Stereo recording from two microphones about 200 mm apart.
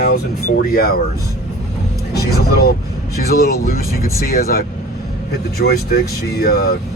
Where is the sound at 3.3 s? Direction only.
50° left (ahead or behind).